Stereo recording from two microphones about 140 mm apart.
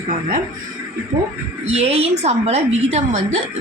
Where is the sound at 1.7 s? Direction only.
50° right (ahead or behind).